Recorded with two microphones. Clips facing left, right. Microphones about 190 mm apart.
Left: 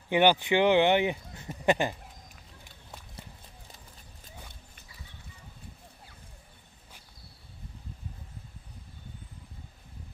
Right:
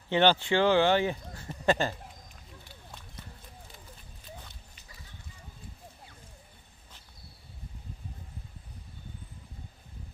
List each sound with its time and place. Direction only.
0.1 s speech: 15° left (ahead or behind)